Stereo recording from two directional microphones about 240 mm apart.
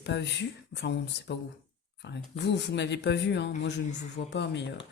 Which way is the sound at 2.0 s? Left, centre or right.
Left.